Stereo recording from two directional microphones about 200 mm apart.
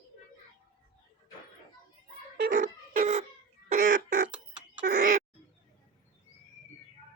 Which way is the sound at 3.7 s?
40° right (ahead or behind).